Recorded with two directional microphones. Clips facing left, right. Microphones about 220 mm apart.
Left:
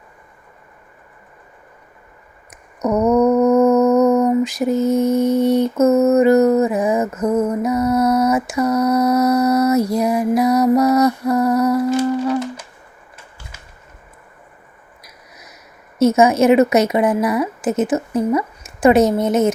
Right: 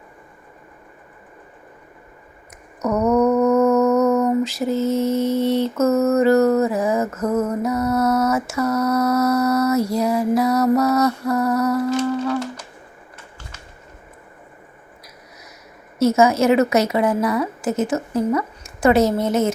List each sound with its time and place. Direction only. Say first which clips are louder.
2.5 s humming: left 3 dB; 20° left (ahead or behind)
16.0 s a woman's voice: left 3 dB; 20° left (ahead or behind)